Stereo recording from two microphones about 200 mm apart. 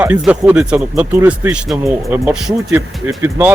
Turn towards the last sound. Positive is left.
turn(degrees=-10)  # may be behind; listen again after turning